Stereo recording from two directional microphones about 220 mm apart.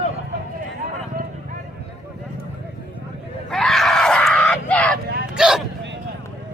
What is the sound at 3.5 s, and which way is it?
Screaming, centre (ahead or behind).